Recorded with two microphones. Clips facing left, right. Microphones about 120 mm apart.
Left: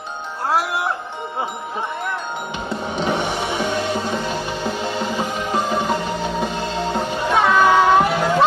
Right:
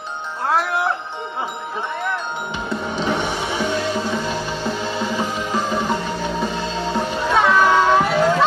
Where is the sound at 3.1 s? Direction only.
55° left (ahead or behind).